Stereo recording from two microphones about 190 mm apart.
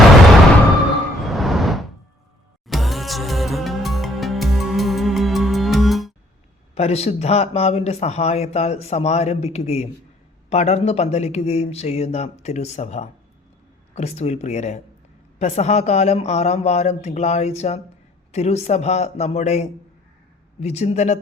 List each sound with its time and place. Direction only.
1.2 s a sound: centre (ahead or behind)
2.6 s music: centre (ahead or behind)
6.7 s speech: 35° left (ahead or behind)